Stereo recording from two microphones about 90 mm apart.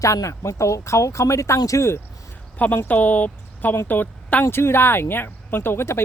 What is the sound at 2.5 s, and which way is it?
A woman's voice, 15° left (ahead or behind).